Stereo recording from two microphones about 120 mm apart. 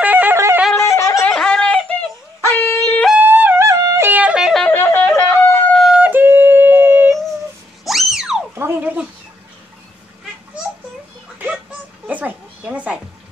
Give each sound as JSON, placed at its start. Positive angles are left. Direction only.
{"t": 0.0, "sound": "yodeling", "side_deg": -15}
{"t": 0.8, "sound": "music", "side_deg": 25}
{"t": 1.3, "sound": "a sound", "side_deg": 5}
{"t": 2.4, "sound": "shofar", "side_deg": 20}
{"t": 3.2, "sound": "music", "side_deg": -15}
{"t": 4.6, "sound": "wind instrument", "side_deg": 20}
{"t": 5.7, "sound": "wind instrument", "side_deg": 0}
{"t": 5.9, "sound": "yodeling", "side_deg": -15}
{"t": 7.8, "sound": "music", "side_deg": 0}
{"t": 8.5, "sound": "a sound", "side_deg": -15}
{"t": 11.3, "sound": "a sound", "side_deg": -10}